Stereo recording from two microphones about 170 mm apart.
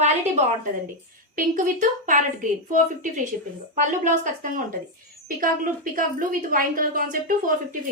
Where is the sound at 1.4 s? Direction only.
50° right (ahead or behind).